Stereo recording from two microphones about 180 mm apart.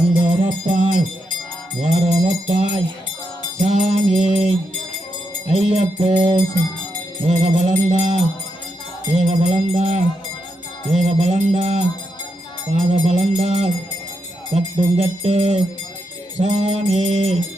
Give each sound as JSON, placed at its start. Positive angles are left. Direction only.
{"t": 0.3, "sound": "music", "side_deg": -45}
{"t": 1.8, "sound": "mantra", "side_deg": -35}
{"t": 5.5, "sound": "music", "side_deg": -35}